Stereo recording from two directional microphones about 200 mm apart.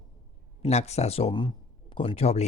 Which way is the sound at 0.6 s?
30° left (ahead or behind).